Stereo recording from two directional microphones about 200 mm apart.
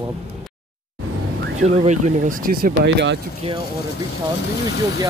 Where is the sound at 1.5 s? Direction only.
35° right (ahead or behind); by 3.1 s 50° right (ahead or behind).